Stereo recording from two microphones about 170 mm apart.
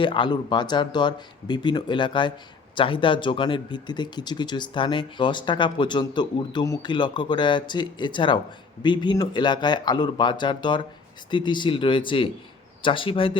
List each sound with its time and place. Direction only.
0.0 s a man's voice: 30° left (ahead or behind)